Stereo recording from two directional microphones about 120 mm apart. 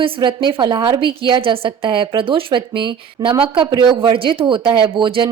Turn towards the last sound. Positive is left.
turn(degrees=-45)  # may be behind; listen again after turning